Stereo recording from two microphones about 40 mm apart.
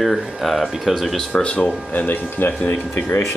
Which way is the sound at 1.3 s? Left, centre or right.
Left.